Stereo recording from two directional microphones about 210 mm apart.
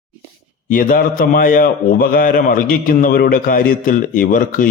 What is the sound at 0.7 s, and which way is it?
A man's voice, 40° left (ahead or behind).